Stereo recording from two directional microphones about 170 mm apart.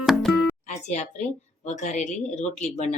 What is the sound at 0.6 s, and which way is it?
Music, 45° left (ahead or behind).